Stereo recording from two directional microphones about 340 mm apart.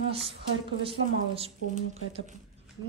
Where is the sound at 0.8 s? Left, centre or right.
Centre.